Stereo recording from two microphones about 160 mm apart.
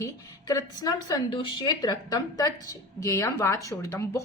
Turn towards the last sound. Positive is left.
turn(degrees=20)  # may be behind; listen again after turning